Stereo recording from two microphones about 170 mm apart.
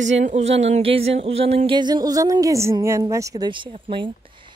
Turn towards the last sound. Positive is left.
turn(degrees=-30)  # may be behind; listen again after turning